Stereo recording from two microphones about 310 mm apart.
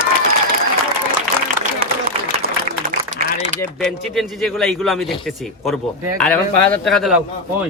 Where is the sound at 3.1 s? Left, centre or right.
Right.